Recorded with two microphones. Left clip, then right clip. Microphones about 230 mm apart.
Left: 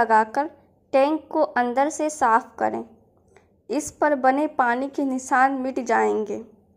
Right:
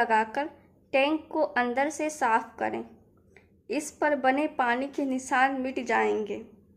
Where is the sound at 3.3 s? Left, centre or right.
Centre.